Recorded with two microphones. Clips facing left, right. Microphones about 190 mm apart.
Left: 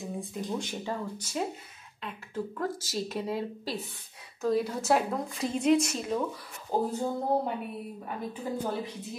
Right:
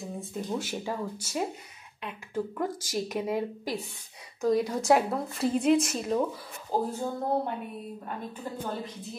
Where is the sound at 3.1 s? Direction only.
15° right (ahead or behind).